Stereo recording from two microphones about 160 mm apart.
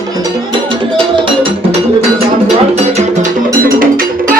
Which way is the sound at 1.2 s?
30° right (ahead or behind).